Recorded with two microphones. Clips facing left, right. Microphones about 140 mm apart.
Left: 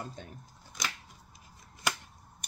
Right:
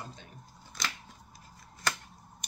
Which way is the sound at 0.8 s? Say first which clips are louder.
Even; 15° left (ahead or behind).